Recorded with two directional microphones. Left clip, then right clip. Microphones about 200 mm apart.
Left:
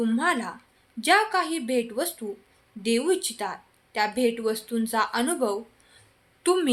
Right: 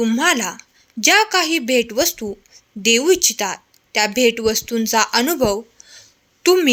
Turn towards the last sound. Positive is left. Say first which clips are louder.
# right 9 dB
turn(degrees=-40)  # may be behind; listen again after turning